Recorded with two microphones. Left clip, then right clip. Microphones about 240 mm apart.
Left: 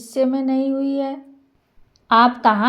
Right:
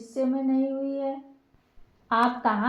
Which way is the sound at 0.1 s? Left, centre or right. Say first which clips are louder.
Left 7 dB; left.